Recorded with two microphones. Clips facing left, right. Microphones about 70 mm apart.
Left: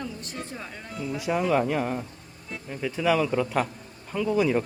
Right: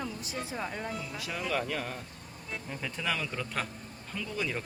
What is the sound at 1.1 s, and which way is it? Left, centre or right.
Speech, centre.